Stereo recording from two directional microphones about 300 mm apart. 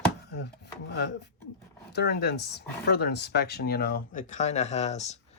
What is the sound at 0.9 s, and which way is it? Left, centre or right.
Speech, left.